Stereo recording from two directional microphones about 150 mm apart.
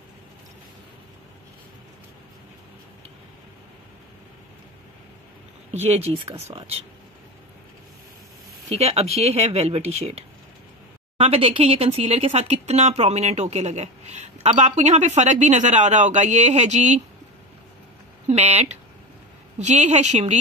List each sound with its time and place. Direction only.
5.7 s speech: 45° right (ahead or behind)
8.6 s speech: 45° right (ahead or behind)
11.1 s speech: 40° right (ahead or behind)
18.3 s speech: 50° right (ahead or behind)